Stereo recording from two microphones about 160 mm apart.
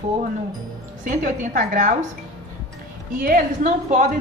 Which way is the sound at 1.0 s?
55° right (ahead or behind).